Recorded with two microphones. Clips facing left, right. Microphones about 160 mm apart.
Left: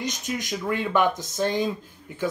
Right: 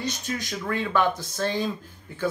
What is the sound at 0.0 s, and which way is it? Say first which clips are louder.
Speech: left 1 dB; 15° left (ahead or behind).